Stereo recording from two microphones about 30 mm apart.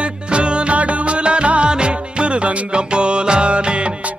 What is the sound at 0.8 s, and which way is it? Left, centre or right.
Music, right.